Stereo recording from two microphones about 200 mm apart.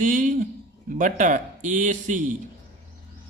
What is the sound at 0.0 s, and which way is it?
A man's voice, 40° right (ahead or behind).